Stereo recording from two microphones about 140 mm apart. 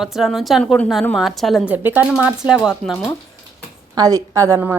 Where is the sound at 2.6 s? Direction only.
5° right (ahead or behind).